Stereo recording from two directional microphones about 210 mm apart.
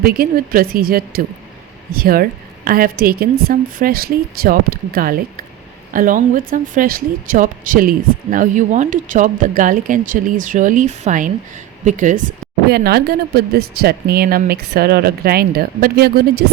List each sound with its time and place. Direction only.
0.0 s speech: 45° right (ahead or behind)